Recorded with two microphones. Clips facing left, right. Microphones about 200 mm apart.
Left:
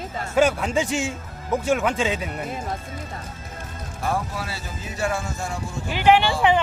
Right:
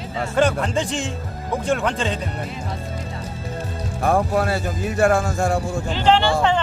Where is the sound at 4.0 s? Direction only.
55° right (ahead or behind).